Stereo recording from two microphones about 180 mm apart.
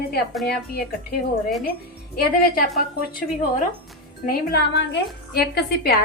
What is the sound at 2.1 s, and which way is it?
Speech, 55° left (ahead or behind).